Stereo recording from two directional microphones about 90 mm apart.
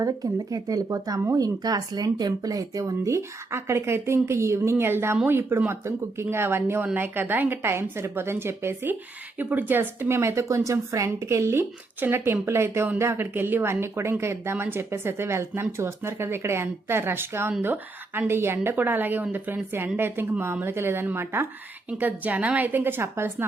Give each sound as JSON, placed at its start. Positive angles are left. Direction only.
{"t": 0.0, "sound": "a woman's voice", "side_deg": -40}